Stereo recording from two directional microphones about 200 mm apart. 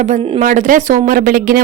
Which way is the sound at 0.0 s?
35° right (ahead or behind).